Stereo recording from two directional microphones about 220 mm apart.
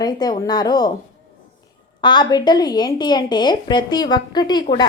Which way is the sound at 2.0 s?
20° left (ahead or behind).